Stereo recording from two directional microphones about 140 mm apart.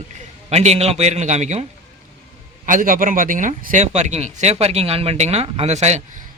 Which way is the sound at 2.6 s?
70° right (ahead or behind).